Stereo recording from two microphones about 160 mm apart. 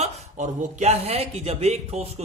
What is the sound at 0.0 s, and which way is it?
A man's voice, 45° right (ahead or behind).